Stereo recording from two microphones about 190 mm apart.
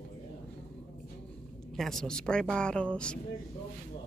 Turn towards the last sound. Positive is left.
turn(degrees=5)  # may be behind; listen again after turning